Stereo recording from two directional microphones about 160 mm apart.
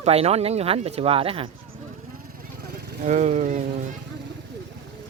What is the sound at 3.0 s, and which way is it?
Speech, 45° right (ahead or behind).